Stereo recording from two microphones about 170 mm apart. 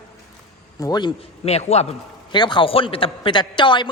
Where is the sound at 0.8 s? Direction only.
25° left (ahead or behind).